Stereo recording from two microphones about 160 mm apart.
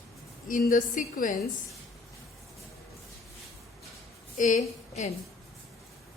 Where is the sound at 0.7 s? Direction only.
55° left (ahead or behind).